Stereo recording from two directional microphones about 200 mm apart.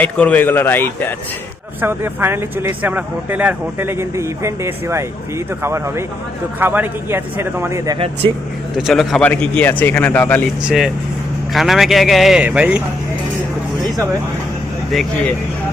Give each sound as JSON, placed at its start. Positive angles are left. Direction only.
{"t": 0.0, "sound": "a man's voice", "side_deg": 5}
{"t": 1.8, "sound": "speech", "side_deg": -10}
{"t": 7.9, "sound": "speech", "side_deg": -30}
{"t": 8.7, "sound": "a man's voice", "side_deg": 0}
{"t": 10.7, "sound": "a man's voice", "side_deg": 0}